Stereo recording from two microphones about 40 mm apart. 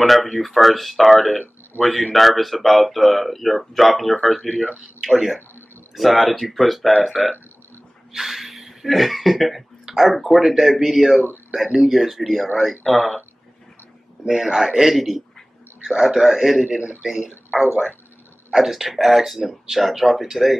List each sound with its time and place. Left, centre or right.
0.0 s a man's voice: centre
14.2 s a man's voice: centre
16.6 s a man's voice: right
18.5 s speech: centre